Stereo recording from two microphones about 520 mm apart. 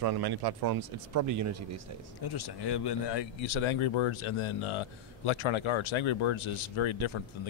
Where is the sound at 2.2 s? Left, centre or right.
Left.